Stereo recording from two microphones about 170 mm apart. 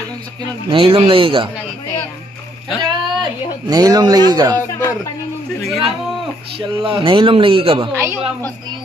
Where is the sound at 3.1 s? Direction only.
25° right (ahead or behind).